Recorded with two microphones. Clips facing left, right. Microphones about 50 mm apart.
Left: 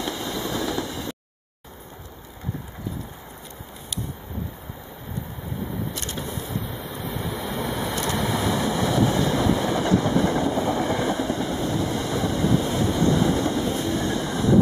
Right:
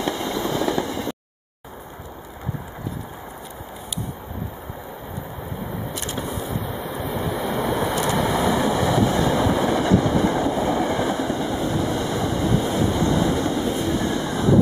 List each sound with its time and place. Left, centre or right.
0.0 s a sound: right
0.7 s a sound: right
5.9 s vehicle: centre
9.4 s train: centre
11.2 s vehicle: centre
11.9 s vehicle: right
12.4 s vehicle: centre
13.4 s train: centre
14.0 s train: centre